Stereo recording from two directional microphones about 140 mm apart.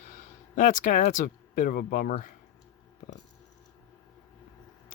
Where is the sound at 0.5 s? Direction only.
75° left (ahead or behind); by 2.1 s 90° left.